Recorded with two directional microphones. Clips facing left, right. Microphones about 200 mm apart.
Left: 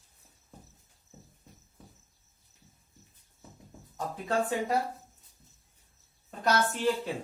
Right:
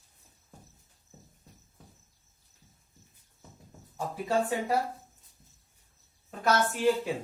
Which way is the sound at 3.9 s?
10° right (ahead or behind).